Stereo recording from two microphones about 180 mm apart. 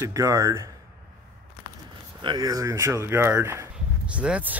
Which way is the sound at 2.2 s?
25° right (ahead or behind).